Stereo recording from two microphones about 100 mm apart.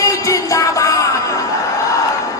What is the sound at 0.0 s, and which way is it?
Music, 35° left (ahead or behind).